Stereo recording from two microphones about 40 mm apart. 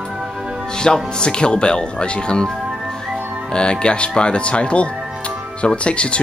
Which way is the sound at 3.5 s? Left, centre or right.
Left.